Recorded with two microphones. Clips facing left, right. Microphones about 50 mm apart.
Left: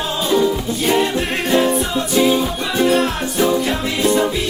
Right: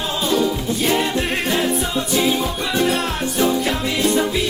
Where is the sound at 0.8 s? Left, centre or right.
Centre.